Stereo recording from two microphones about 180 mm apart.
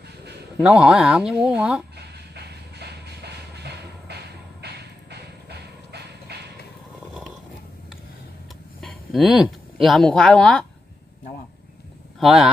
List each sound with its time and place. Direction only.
0.6 s speech: 5° right (ahead or behind)
2.3 s train: 65° right (ahead or behind)
8.8 s speech: centre (ahead or behind)
12.2 s speech: centre (ahead or behind)